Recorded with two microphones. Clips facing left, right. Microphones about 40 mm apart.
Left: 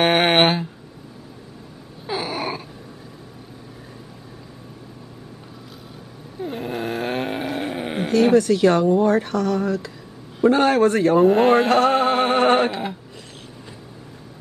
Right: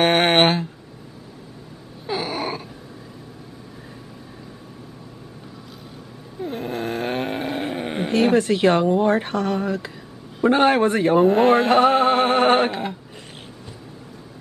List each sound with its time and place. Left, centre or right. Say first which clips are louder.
0.0 s a sound: even; centre
2.0 s a sound: even; centre
6.4 s snoring: even; centre
8.1 s speech: left 2 dB; right
11.2 s speech: left 1 dB; centre
11.9 s music: right 1 dB; centre